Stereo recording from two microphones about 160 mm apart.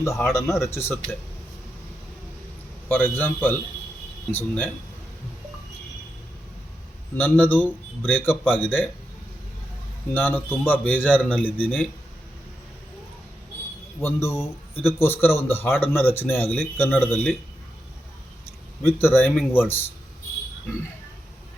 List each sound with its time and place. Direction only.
0.0 s a man's voice: 20° left (ahead or behind)
2.9 s a man's voice: 10° left (ahead or behind)
7.2 s a man's voice: 10° left (ahead or behind)
10.2 s a man's voice: 15° left (ahead or behind)
14.0 s a man's voice: 15° left (ahead or behind)
18.8 s a man's voice: 15° left (ahead or behind)